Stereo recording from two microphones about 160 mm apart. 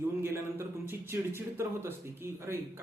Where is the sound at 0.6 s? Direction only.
15° right (ahead or behind).